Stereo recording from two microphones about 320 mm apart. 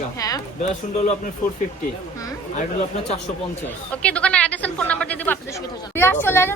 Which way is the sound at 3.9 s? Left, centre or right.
Centre.